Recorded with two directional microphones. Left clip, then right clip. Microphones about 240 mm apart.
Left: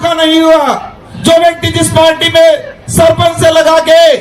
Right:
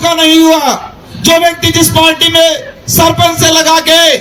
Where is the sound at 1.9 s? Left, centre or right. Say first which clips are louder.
Left 3 dB; centre.